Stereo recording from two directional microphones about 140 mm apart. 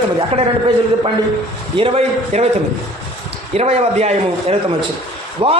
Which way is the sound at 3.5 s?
50° right (ahead or behind).